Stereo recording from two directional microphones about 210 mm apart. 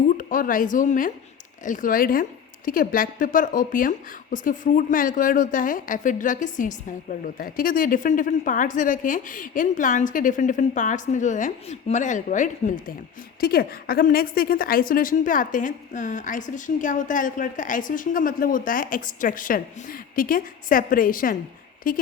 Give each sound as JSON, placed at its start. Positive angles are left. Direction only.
{"t": 0.2, "sound": "a woman's voice", "side_deg": 40}